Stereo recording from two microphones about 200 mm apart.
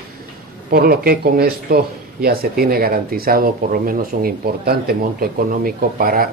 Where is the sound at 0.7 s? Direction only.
50° right (ahead or behind).